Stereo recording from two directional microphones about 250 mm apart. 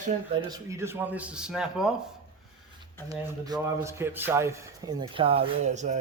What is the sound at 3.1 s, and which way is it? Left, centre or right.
A man's voice, centre.